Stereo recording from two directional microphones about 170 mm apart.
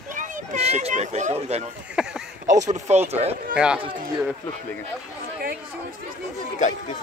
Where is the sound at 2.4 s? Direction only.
45° right (ahead or behind).